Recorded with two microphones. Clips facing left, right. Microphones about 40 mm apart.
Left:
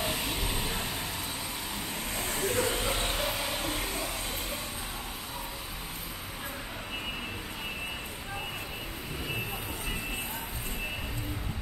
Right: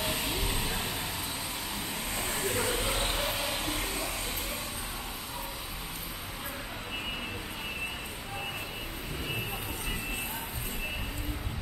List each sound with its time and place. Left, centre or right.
0.0 s vehicle: centre
2.1 s vehicle: centre